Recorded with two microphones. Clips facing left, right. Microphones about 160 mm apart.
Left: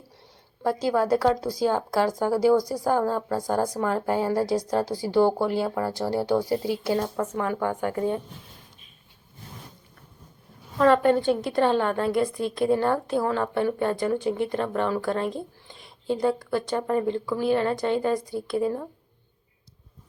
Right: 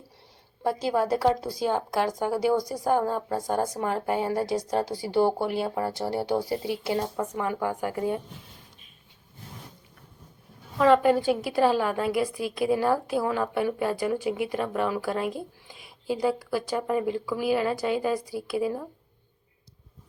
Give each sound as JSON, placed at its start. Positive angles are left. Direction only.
{"t": 0.6, "sound": "speech", "side_deg": -25}
{"t": 7.3, "sound": "a woman's voice", "side_deg": -10}
{"t": 10.8, "sound": "a woman's voice", "side_deg": -5}